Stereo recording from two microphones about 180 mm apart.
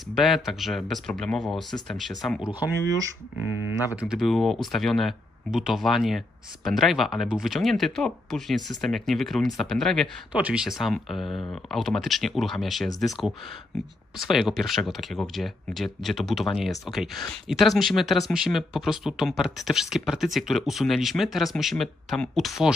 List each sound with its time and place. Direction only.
0.2 s speech: centre (ahead or behind)
3.9 s speech: 5° right (ahead or behind)
11.2 s speech: 25° left (ahead or behind)
11.7 s speech: centre (ahead or behind)
14.1 s speech: centre (ahead or behind)